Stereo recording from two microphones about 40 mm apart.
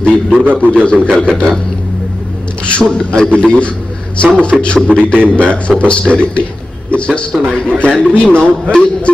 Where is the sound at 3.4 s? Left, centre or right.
Left.